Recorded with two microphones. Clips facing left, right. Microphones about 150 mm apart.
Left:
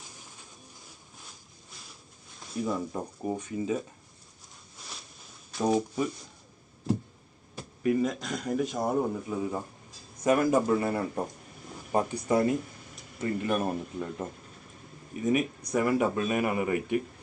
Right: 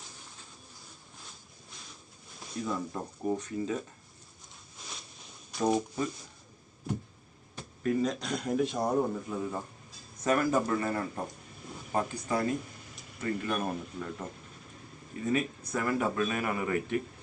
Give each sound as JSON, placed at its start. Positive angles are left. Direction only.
{"t": 2.6, "sound": "a man's voice", "side_deg": 10}
{"t": 5.5, "sound": "a man's voice", "side_deg": 5}
{"t": 7.5, "sound": "a man's voice", "side_deg": 5}